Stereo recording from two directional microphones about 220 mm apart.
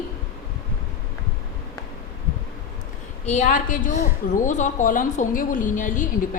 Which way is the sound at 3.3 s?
35° left (ahead or behind).